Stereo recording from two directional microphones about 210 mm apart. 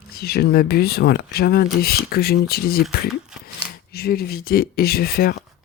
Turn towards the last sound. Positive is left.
turn(degrees=45)  # may be behind; listen again after turning